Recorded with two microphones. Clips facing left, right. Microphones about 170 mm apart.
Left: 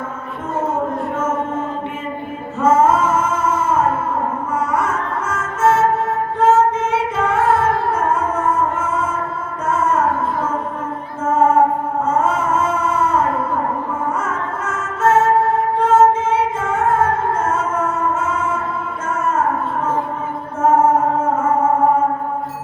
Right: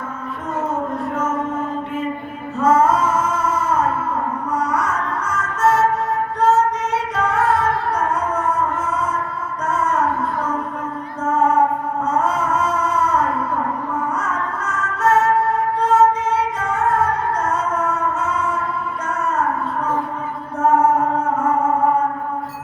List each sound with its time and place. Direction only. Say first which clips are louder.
2.6 s music: left 2 dB; 25° left (ahead or behind)
12.0 s a sound: left 2 dB; 25° left (ahead or behind)
14.2 s music: left 1 dB; 25° left (ahead or behind)
20.8 s music: left 2 dB; 45° left (ahead or behind)